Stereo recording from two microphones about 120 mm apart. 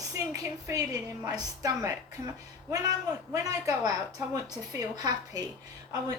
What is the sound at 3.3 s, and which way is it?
A woman's voice, 30° right (ahead or behind).